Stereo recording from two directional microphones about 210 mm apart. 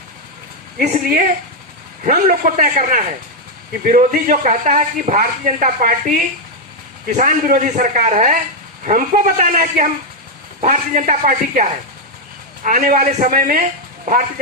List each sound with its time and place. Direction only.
0.8 s speech: 40° right (ahead or behind)